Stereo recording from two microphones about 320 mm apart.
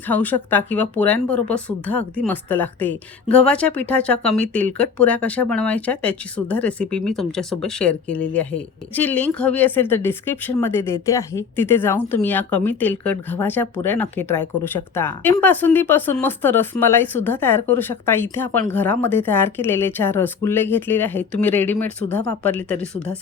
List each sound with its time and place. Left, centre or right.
0.1 s speech: centre